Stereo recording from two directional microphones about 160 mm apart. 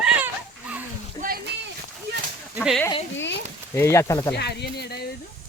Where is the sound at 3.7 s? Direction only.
20° left (ahead or behind).